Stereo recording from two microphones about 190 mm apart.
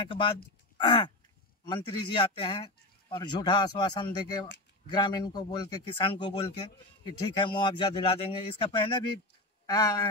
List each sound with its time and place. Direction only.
0.0 s speech: 25° left (ahead or behind)